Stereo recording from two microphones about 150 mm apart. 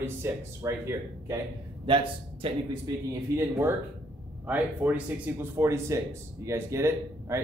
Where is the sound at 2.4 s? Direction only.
35° right (ahead or behind).